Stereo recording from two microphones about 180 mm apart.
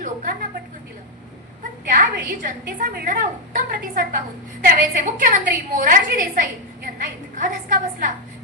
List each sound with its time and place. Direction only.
1.9 s a woman's voice: 50° right (ahead or behind)